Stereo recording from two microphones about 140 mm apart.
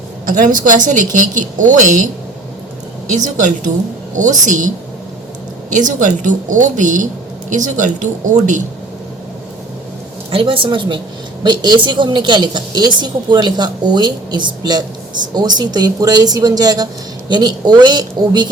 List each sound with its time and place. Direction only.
0.4 s a woman's voice: 70° right (ahead or behind)
3.2 s speech: 65° right (ahead or behind)
5.7 s speech: 65° right (ahead or behind)
10.3 s a woman's voice: 40° right (ahead or behind)